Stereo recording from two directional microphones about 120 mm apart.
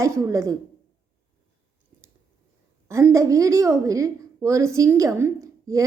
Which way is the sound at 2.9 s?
25° right (ahead or behind).